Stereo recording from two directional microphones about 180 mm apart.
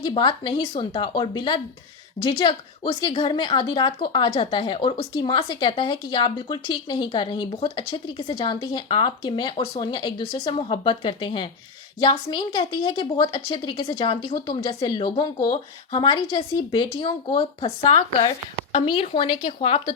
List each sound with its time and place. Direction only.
0.0 s a woman's voice: 25° left (ahead or behind)